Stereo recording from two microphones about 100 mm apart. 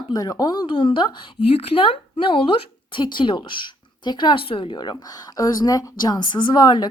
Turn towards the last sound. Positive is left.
turn(degrees=45)  # may be behind; listen again after turning